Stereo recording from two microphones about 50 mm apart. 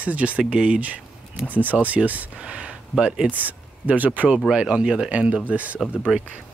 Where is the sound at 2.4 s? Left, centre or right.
Right.